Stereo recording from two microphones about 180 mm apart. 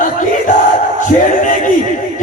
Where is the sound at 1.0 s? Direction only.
45° left (ahead or behind).